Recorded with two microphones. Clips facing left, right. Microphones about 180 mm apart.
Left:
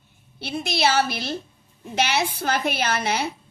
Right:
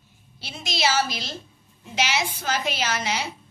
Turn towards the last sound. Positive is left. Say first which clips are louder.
# left 3 dB
turn(degrees=55)  # may be behind; listen again after turning